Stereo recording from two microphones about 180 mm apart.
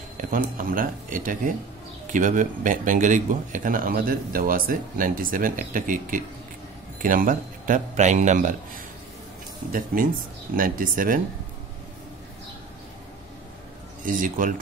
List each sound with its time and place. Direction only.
0.2 s a man's voice: 50° right (ahead or behind)
9.7 s a man's voice: 50° right (ahead or behind)
14.0 s a man's voice: 50° right (ahead or behind)